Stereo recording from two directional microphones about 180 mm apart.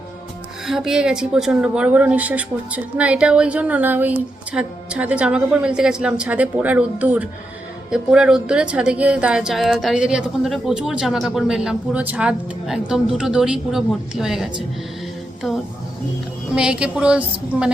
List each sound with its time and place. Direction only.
0.7 s a woman's voice: centre (ahead or behind)